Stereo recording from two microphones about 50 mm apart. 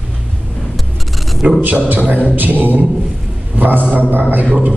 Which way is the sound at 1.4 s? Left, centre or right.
Right.